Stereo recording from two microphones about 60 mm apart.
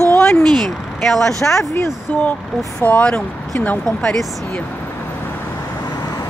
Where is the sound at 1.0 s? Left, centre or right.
Centre.